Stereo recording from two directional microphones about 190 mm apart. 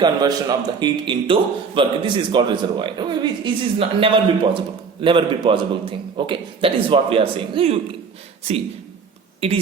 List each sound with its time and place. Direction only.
0.0 s a man's voice: 20° right (ahead or behind)